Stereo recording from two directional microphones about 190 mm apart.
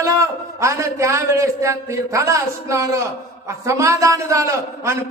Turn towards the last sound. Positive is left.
turn(degrees=-15)  # may be behind; listen again after turning